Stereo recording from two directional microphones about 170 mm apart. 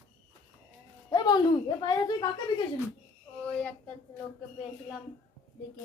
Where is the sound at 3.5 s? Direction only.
10° left (ahead or behind).